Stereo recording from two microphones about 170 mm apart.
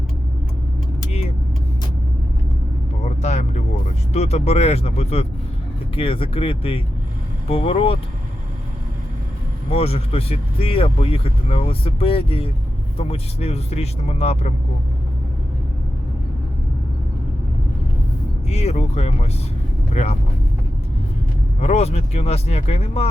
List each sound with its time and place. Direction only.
3.0 s a sound: 40° left (ahead or behind)
6.0 s speech: 35° left (ahead or behind)
9.7 s speech: 35° left (ahead or behind)
18.4 s speech: 40° left (ahead or behind)
21.6 s speech: 40° left (ahead or behind)